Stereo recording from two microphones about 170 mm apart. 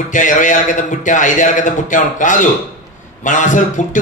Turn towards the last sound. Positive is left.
turn(degrees=50)  # may be behind; listen again after turning